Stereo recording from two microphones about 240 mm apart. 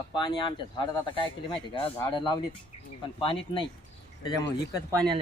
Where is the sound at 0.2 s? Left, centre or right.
Centre.